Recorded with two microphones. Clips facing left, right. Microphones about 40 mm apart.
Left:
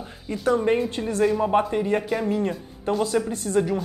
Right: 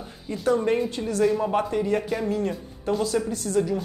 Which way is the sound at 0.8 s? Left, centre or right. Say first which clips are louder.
Left 1 dB; left.